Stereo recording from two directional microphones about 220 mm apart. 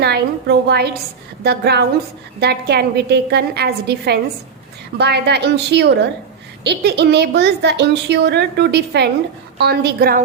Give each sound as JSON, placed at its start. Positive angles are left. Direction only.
{"t": 0.0, "sound": "a woman's voice", "side_deg": -50}